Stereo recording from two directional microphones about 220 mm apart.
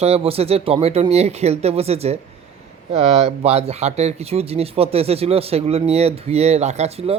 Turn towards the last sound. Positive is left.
turn(degrees=-25)  # may be behind; listen again after turning